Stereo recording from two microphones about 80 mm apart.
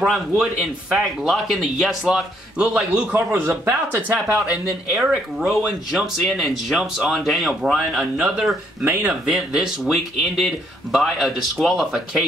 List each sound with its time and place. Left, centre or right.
0.3 s a man's voice: centre
3.2 s speech: right
4.9 s speech: centre
7.9 s a man's voice: centre